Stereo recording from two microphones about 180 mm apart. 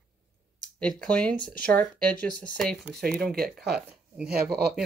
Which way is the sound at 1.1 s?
5° left (ahead or behind).